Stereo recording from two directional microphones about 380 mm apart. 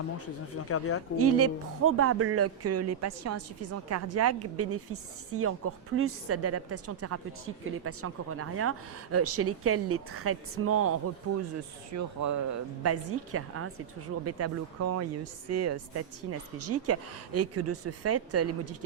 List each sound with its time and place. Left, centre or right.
0.5 s speech: left
1.1 s speech: right
11.9 s speech: right